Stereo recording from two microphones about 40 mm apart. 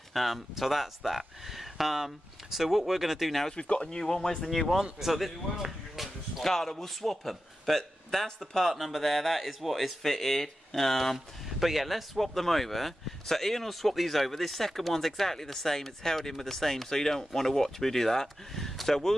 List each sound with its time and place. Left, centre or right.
0.1 s speech: centre
3.4 s speech: left
4.5 s speech: centre
5.6 s a sound: centre
6.4 s speech: centre
11.1 s speech: centre